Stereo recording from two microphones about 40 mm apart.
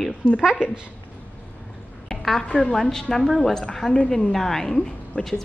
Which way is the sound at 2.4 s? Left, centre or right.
Left.